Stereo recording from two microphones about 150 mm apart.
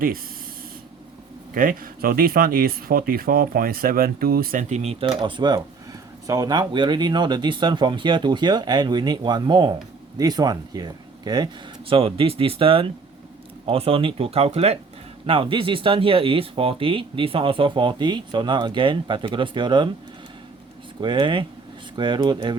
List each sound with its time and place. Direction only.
1.5 s speech: 70° right (ahead or behind)
4.7 s speech: 40° right (ahead or behind)
21.0 s speech: 30° right (ahead or behind)